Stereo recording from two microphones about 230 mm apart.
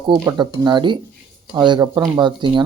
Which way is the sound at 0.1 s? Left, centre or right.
Centre.